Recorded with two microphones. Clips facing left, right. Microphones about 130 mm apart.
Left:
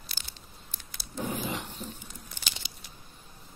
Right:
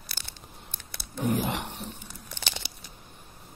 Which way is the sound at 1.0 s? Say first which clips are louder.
Right 6 dB; 60° right (ahead or behind).